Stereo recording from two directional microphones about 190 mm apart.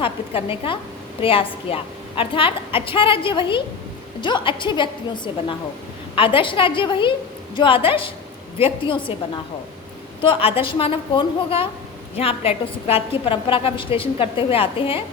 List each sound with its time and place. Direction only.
0.0 s a woman's voice: 30° left (ahead or behind)
10.2 s a woman's voice: 30° left (ahead or behind)